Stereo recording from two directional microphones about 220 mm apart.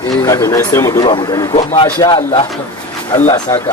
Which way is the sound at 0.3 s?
15° left (ahead or behind).